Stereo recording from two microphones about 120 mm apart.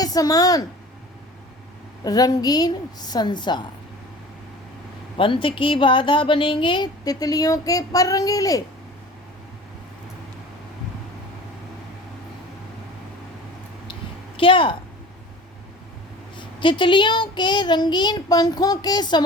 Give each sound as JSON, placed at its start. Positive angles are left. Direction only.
{"t": 0.0, "sound": "a woman's voice", "side_deg": 30}
{"t": 2.0, "sound": "speech", "side_deg": 30}
{"t": 5.1, "sound": "speech", "side_deg": 45}
{"t": 14.3, "sound": "a woman's voice", "side_deg": 45}
{"t": 16.4, "sound": "speech", "side_deg": 45}